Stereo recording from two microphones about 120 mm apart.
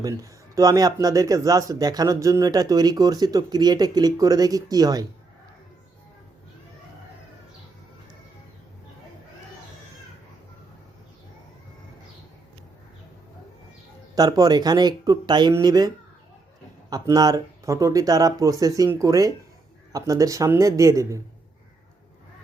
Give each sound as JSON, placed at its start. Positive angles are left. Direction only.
{"t": 0.0, "sound": "speech", "side_deg": -25}
{"t": 14.2, "sound": "speech", "side_deg": -30}
{"t": 16.9, "sound": "speech", "side_deg": -30}